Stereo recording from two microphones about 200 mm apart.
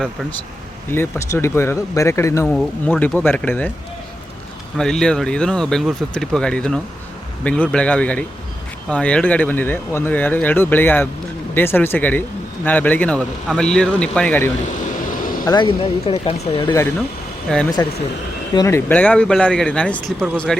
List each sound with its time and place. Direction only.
0.9 s speech: 10° left (ahead or behind)
4.8 s speech: 5° left (ahead or behind)
15.4 s speech: 25° left (ahead or behind)
17.5 s speech: 5° left (ahead or behind)
18.5 s speech: 15° left (ahead or behind)